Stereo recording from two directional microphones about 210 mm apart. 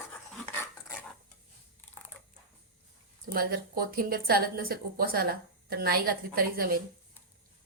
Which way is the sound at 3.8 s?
45° right (ahead or behind).